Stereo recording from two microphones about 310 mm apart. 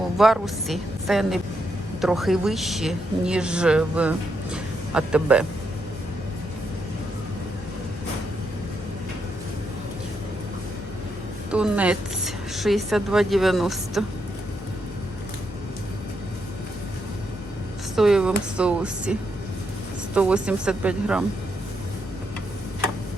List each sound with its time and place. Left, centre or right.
0.2 s a man's voice: centre
11.5 s speech: centre
17.9 s speech: centre
20.1 s speech: centre